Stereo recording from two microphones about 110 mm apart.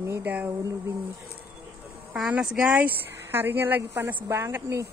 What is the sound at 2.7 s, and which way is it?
A woman's voice, 15° right (ahead or behind).